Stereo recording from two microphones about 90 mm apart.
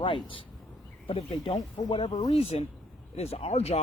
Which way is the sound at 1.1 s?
90° left.